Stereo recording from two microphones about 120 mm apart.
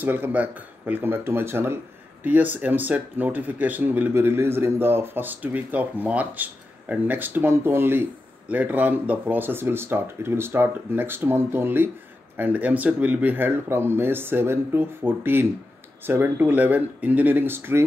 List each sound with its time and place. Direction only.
0.0 s speech: 15° right (ahead or behind)